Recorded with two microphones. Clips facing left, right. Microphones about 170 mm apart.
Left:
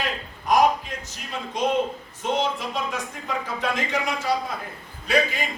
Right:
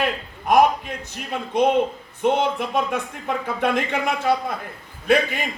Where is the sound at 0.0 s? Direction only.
55° right (ahead or behind).